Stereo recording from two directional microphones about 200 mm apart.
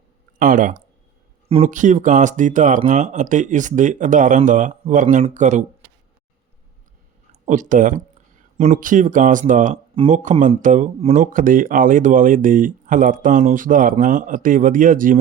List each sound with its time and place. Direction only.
0.3 s speech: 45° right (ahead or behind)
7.4 s speech: 40° right (ahead or behind)